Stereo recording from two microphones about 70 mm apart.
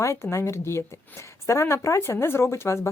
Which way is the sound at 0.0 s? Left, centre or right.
Left.